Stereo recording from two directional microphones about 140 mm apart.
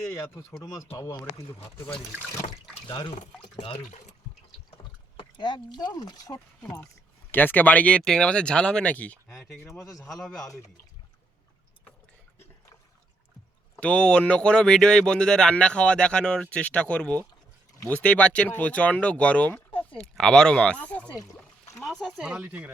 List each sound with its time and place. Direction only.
0.6 s speech: 25° left (ahead or behind)
2.5 s water: 35° left (ahead or behind)
3.5 s speech: 35° left (ahead or behind)
3.8 s speech: 55° left (ahead or behind)
4.8 s speech: 35° left (ahead or behind)
7.3 s a man's voice: 15° left (ahead or behind)
13.7 s speech: 10° left (ahead or behind)
21.8 s speech: 5° right (ahead or behind)